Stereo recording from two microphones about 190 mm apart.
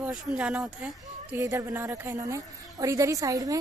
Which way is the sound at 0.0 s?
5° right (ahead or behind).